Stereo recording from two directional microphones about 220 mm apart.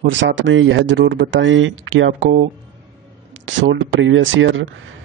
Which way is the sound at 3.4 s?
60° right (ahead or behind).